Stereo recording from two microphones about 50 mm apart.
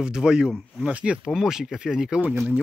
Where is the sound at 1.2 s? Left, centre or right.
Centre.